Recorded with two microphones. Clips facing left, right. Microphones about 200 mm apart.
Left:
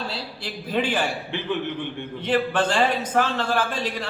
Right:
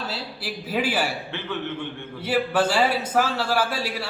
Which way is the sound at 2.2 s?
5° right (ahead or behind).